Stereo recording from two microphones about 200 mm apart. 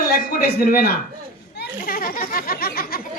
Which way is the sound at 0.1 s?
45° left (ahead or behind).